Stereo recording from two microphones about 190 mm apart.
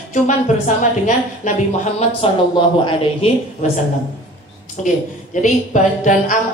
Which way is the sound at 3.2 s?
30° left (ahead or behind).